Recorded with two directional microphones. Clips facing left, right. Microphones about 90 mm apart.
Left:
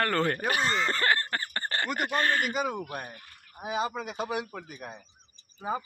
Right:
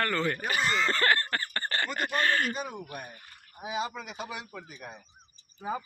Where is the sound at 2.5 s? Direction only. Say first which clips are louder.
Left 6 dB; 75° left (ahead or behind).